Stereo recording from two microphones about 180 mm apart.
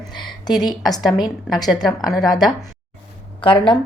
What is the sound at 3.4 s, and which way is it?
Speech, 30° left (ahead or behind).